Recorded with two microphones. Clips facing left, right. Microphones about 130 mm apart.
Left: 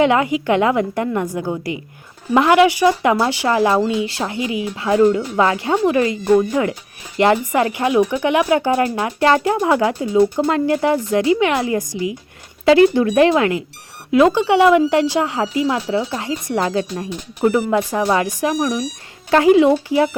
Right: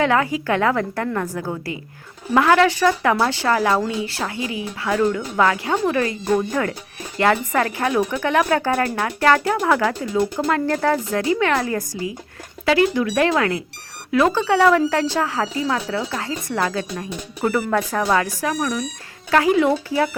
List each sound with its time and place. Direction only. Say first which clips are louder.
0.0 s speech: left 4 dB; 20° left (ahead or behind)
12.6 s speech: left 6 dB; 30° left (ahead or behind)